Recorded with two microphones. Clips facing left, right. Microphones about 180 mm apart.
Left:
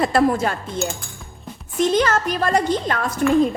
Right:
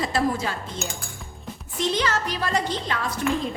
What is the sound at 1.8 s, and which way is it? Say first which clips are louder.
A woman's voice: left 6 dB; 50° left (ahead or behind).